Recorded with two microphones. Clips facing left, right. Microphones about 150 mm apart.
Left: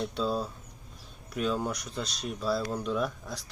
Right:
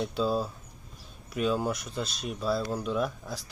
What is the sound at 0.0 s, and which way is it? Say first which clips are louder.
Speech: right 2 dB; centre (ahead or behind).